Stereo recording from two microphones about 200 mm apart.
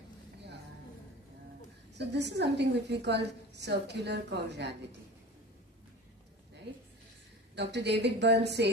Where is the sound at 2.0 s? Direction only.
60° right (ahead or behind).